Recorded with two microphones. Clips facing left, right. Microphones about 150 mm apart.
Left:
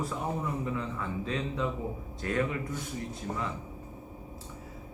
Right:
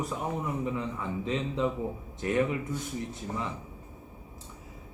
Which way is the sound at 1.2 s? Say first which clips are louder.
Right 4 dB; 20° right (ahead or behind).